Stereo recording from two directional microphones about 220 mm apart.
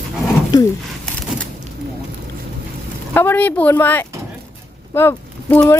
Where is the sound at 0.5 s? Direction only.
15° left (ahead or behind).